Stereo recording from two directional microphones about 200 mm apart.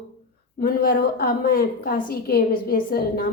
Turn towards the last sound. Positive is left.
turn(degrees=45)  # may be behind; listen again after turning